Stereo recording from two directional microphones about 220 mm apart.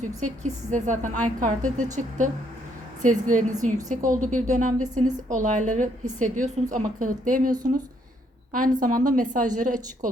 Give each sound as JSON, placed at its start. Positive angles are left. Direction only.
{"t": 0.2, "sound": "a woman's voice", "side_deg": -35}
{"t": 8.5, "sound": "a woman's voice", "side_deg": -40}